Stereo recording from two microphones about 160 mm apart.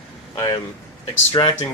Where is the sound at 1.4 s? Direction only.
30° left (ahead or behind).